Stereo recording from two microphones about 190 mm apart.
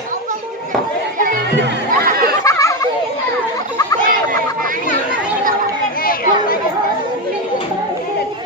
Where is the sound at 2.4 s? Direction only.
15° left (ahead or behind).